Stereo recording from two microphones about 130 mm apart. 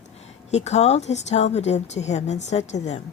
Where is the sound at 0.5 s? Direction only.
60° left (ahead or behind).